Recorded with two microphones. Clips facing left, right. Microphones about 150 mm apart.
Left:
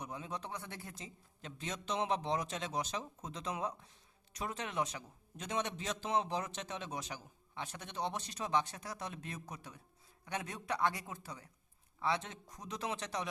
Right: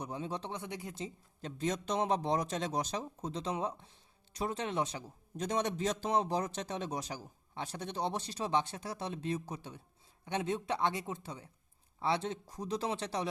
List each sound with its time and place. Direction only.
0.0 s speech: 30° right (ahead or behind)
0.9 s a man's voice: 35° right (ahead or behind)